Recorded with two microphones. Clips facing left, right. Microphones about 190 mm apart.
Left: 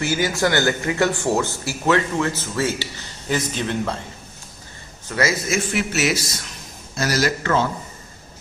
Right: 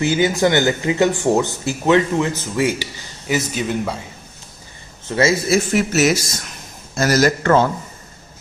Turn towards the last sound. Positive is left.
turn(degrees=-50)  # may be behind; listen again after turning